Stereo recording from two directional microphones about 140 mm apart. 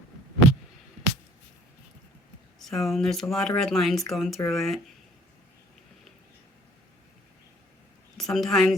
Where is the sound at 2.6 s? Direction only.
Centre (ahead or behind).